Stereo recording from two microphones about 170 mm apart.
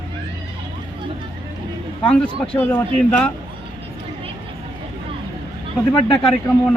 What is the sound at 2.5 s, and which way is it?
Speech, 15° left (ahead or behind).